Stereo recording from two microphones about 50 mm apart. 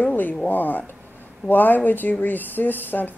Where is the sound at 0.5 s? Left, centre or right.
Left.